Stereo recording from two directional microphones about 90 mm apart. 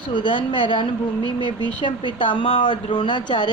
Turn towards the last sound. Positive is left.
turn(degrees=60)  # may be behind; listen again after turning